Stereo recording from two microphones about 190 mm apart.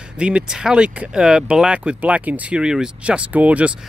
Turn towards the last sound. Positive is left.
turn(degrees=-5)  # may be behind; listen again after turning